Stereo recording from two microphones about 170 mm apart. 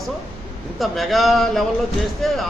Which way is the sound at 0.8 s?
Centre (ahead or behind).